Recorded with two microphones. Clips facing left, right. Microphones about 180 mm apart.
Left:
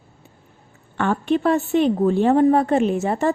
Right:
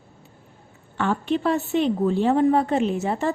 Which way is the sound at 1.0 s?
55° left (ahead or behind).